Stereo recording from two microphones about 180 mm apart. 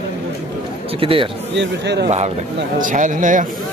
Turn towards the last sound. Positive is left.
turn(degrees=-45)  # may be behind; listen again after turning